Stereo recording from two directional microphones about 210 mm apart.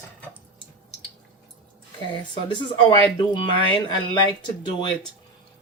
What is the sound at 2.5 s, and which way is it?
Speech, 20° left (ahead or behind).